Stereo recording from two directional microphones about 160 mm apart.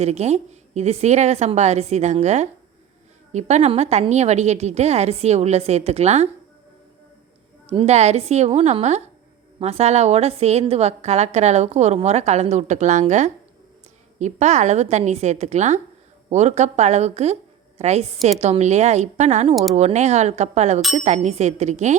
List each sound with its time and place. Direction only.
0.0 s a woman's voice: 40° right (ahead or behind)
7.7 s a woman's voice: 40° right (ahead or behind)